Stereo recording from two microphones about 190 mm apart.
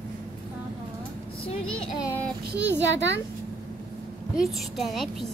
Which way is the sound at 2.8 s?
70° right (ahead or behind).